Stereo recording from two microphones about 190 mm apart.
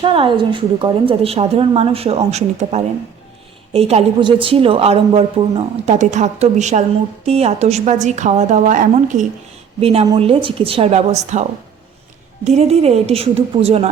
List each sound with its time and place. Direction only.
0.0 s a woman's voice: 25° right (ahead or behind); by 9.2 s 40° right (ahead or behind)
9.8 s a woman's voice: 30° right (ahead or behind)
12.5 s a woman's voice: 35° right (ahead or behind)